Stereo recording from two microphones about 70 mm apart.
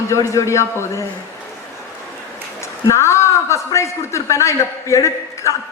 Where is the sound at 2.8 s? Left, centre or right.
Left.